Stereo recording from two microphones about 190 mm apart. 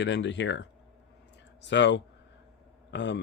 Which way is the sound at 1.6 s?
70° left (ahead or behind).